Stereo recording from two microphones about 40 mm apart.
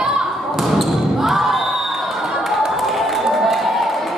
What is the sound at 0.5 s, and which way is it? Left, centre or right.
Basketball bounce, centre.